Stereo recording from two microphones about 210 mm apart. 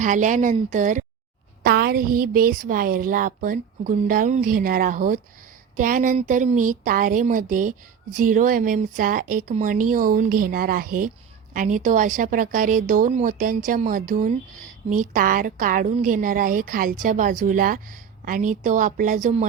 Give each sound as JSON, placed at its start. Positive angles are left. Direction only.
{"t": 0.0, "sound": "a woman's voice", "side_deg": -35}